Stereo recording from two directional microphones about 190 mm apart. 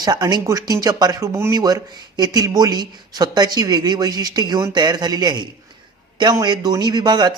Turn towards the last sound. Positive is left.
turn(degrees=-20)  # may be behind; listen again after turning